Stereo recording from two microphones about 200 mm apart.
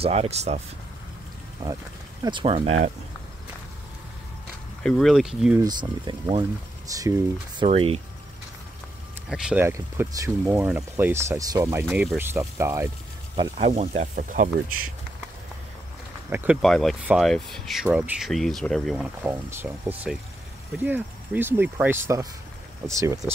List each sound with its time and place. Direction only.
0.0 s speech: 30° right (ahead or behind)
1.6 s speech: 10° right (ahead or behind)
2.2 s speech: 25° right (ahead or behind)
4.8 s speech: centre (ahead or behind)
5.6 s speech: 20° right (ahead or behind)
9.3 s speech: 5° right (ahead or behind)
13.4 s speech: 30° right (ahead or behind)
16.3 s speech: 10° right (ahead or behind)
16.6 s speech: centre (ahead or behind); by 23.3 s 15° right (ahead or behind)